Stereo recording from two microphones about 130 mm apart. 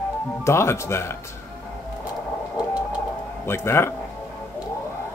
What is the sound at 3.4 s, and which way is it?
Speech, 20° left (ahead or behind).